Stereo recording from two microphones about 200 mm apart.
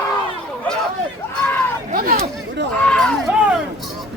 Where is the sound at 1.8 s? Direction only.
45° right (ahead or behind).